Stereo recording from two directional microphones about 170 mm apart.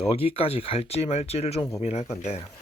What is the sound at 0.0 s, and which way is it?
Speech, 35° left (ahead or behind).